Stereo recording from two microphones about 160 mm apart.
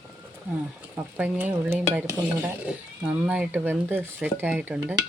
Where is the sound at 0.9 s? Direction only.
10° right (ahead or behind).